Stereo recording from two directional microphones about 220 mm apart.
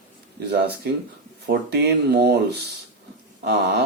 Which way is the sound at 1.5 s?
50° right (ahead or behind).